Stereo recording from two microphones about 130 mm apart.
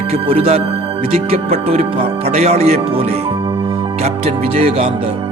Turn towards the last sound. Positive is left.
turn(degrees=-45)  # may be behind; listen again after turning